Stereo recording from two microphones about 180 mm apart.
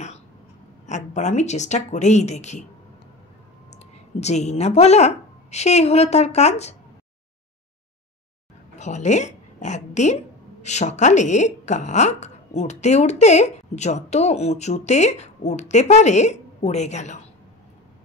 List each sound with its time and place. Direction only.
0.8 s a woman's voice: 40° left (ahead or behind)
4.2 s a woman's voice: 40° left (ahead or behind)
8.7 s a woman's voice: 40° left (ahead or behind)